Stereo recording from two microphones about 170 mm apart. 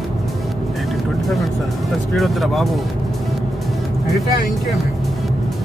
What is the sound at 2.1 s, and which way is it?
Speech, centre (ahead or behind).